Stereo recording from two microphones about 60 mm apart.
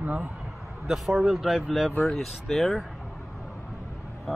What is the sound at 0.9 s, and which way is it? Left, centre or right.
Speech, centre.